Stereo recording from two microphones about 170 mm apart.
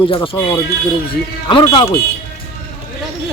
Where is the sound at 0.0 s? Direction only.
30° left (ahead or behind).